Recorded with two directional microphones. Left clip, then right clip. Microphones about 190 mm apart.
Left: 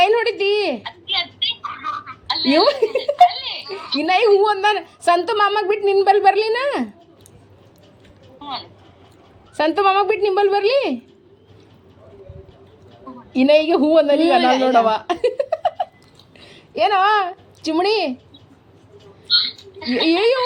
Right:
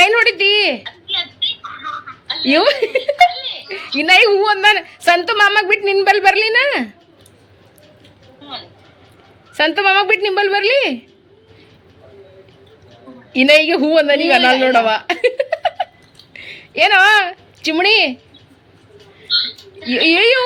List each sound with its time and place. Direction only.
0.0 s a sound: centre (ahead or behind)
1.6 s chicken: 30° left (ahead or behind)
2.5 s a woman's voice: centre (ahead or behind)
9.6 s speech: 5° left (ahead or behind)
13.3 s a woman's voice: 5° left (ahead or behind)
19.9 s speech: 5° left (ahead or behind)